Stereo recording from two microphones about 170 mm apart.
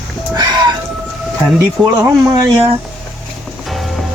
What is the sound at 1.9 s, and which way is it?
Speech, 20° right (ahead or behind).